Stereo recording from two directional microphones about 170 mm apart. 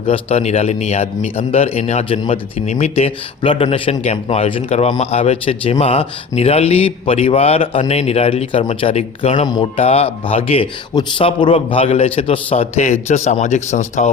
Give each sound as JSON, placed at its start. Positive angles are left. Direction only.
{"t": 0.1, "sound": "a man's voice", "side_deg": 35}
{"t": 9.5, "sound": "a man's voice", "side_deg": 30}